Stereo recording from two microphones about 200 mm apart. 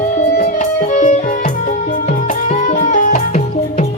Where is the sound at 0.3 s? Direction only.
40° left (ahead or behind).